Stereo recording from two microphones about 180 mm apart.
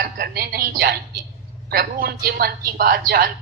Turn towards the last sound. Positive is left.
turn(degrees=-55)  # may be behind; listen again after turning